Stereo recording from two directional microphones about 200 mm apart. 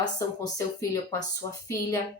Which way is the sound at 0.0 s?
20° left (ahead or behind).